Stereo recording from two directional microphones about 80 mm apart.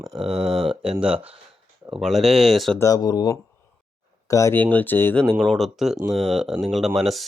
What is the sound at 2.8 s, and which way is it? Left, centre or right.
Speech, left.